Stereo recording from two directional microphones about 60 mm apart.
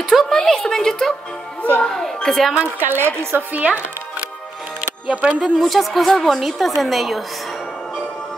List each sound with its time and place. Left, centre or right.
0.1 s a woman's voice: centre
2.8 s speech: right
5.0 s speech: centre
5.4 s speech: centre